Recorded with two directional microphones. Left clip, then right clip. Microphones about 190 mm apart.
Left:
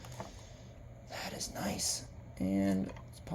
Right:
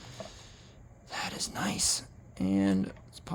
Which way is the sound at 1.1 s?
35° right (ahead or behind).